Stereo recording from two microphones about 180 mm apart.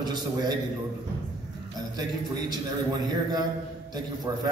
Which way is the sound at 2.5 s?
20° right (ahead or behind).